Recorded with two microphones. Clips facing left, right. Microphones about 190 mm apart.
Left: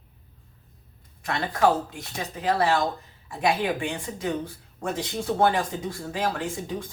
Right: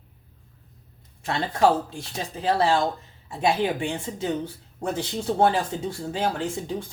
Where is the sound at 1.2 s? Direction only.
30° right (ahead or behind).